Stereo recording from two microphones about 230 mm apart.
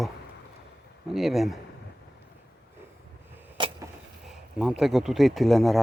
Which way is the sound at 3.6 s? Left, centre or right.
Centre.